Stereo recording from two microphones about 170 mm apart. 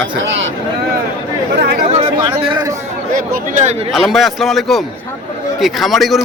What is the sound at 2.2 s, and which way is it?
Speech, 25° right (ahead or behind).